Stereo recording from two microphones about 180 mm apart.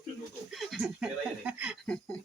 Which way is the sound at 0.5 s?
Centre (ahead or behind).